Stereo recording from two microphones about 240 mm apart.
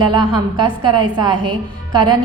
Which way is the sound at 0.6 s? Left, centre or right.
Centre.